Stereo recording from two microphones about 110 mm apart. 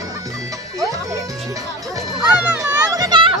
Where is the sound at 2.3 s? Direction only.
15° right (ahead or behind).